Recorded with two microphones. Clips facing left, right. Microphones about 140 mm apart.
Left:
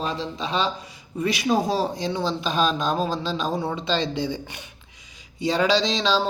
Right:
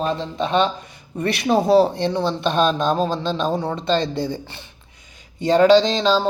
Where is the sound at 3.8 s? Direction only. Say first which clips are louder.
Right 5 dB; 50° right (ahead or behind).